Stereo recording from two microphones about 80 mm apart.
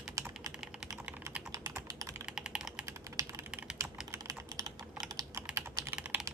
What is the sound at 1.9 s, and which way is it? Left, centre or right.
Typing, right.